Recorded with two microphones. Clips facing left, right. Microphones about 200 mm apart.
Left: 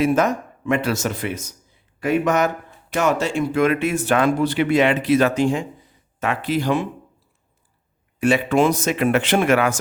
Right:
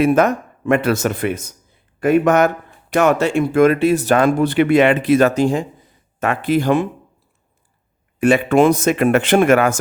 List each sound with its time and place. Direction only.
0.0 s speech: 60° right (ahead or behind); by 5.6 s 40° right (ahead or behind)
6.1 s speech: 50° right (ahead or behind)
8.2 s speech: 55° right (ahead or behind)